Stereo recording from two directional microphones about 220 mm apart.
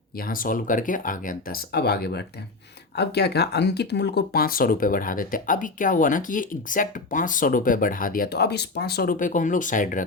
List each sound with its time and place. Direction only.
0.2 s speech: 40° left (ahead or behind)